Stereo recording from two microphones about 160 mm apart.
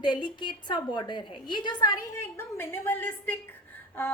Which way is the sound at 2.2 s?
15° left (ahead or behind).